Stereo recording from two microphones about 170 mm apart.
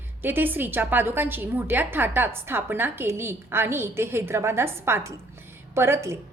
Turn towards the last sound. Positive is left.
turn(degrees=-15)  # may be behind; listen again after turning